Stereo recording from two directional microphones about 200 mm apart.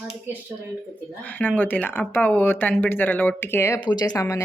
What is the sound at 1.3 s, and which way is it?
Speech, 10° left (ahead or behind).